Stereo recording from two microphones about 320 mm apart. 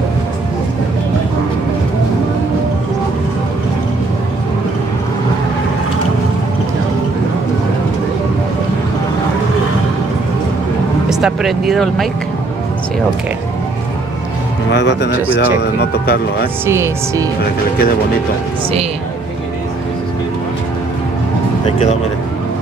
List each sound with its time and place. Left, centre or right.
11.1 s speech: centre
14.7 s speech: left
16.6 s speech: centre